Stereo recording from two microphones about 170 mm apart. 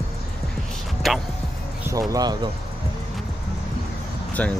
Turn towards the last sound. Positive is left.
turn(degrees=10)  # may be behind; listen again after turning